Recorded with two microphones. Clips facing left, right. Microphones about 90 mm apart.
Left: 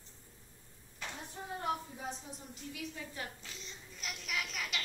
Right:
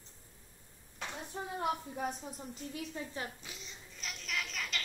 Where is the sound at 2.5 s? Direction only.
35° right (ahead or behind).